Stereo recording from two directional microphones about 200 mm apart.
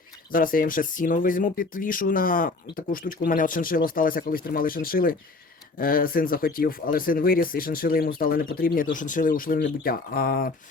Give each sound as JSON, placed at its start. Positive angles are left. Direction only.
{"t": 0.3, "sound": "speech", "side_deg": 45}